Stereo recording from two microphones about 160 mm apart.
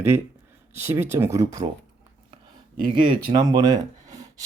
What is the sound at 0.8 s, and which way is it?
Speech, 15° right (ahead or behind).